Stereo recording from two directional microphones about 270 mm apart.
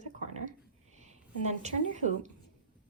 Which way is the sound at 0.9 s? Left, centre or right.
Right.